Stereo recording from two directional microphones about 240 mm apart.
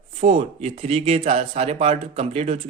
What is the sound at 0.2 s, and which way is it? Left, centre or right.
Speech, right.